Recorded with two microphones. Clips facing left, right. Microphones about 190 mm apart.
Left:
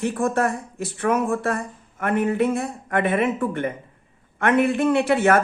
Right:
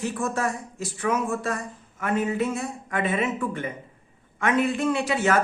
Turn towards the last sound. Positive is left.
turn(degrees=55)  # may be behind; listen again after turning